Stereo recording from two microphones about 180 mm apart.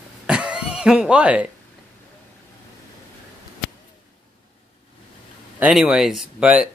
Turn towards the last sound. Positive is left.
turn(degrees=-5)  # may be behind; listen again after turning